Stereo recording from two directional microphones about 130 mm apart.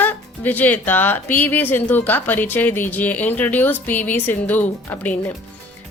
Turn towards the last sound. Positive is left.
turn(degrees=15)  # may be behind; listen again after turning